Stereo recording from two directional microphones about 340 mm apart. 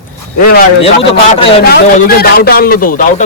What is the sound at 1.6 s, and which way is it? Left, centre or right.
A man's voice, left.